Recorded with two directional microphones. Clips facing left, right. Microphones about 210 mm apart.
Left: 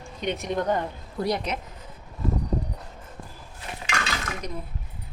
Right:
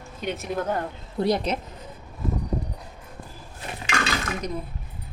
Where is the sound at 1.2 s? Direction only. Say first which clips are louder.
Right 4 dB; 30° right (ahead or behind).